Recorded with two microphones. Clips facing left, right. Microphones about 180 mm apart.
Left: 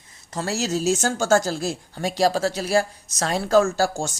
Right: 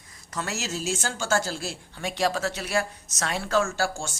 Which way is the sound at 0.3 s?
35° left (ahead or behind).